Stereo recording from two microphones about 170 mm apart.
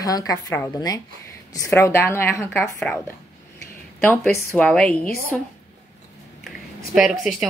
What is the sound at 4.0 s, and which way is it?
A woman's voice, 5° left (ahead or behind).